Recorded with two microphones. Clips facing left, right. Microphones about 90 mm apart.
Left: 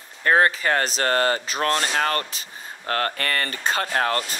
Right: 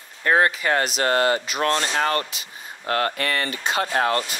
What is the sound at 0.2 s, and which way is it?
Speech, 35° left (ahead or behind).